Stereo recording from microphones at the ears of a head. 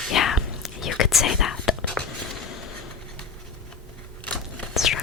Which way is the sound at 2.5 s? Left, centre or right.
Left.